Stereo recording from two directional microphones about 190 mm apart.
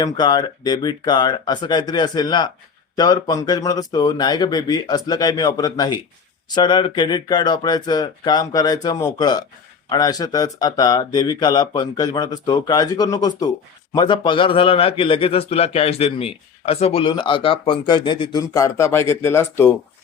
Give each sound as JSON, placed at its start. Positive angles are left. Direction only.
{"t": 0.0, "sound": "a man's voice", "side_deg": 20}